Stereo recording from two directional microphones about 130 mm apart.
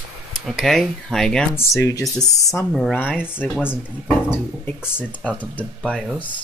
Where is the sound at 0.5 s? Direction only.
Centre (ahead or behind).